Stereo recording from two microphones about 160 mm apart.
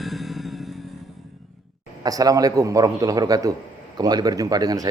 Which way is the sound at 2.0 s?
25° right (ahead or behind).